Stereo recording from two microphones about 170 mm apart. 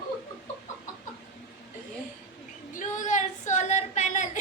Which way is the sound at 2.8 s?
45° left (ahead or behind).